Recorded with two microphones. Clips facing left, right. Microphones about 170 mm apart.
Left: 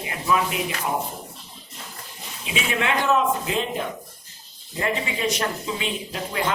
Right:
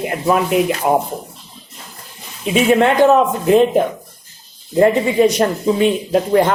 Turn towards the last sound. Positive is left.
turn(degrees=-50)  # may be behind; listen again after turning